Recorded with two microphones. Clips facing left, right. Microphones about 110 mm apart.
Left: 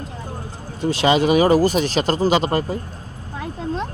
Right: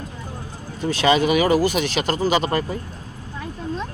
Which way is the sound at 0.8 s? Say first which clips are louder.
Left 1 dB; 30° left (ahead or behind).